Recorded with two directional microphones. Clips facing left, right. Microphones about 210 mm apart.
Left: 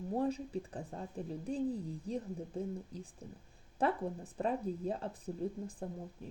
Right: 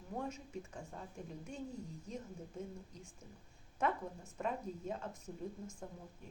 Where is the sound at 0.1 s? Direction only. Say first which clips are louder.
Left 8 dB; 35° left (ahead or behind).